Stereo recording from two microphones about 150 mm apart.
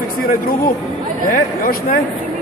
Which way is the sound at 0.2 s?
75° left (ahead or behind).